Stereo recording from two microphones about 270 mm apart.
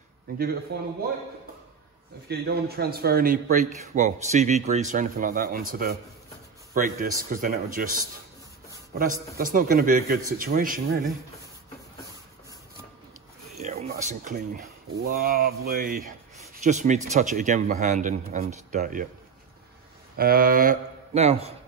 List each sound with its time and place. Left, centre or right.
0.7 s a man's voice: right
2.2 s a man's voice: right
13.6 s speech: right
20.2 s a man's voice: right